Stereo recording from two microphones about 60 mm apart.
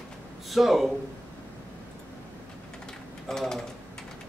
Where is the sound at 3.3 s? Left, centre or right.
Centre.